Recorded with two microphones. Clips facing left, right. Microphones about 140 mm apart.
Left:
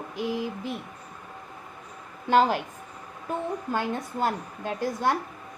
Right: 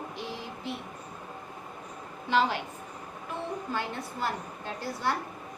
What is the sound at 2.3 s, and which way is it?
A woman's voice, 45° left (ahead or behind).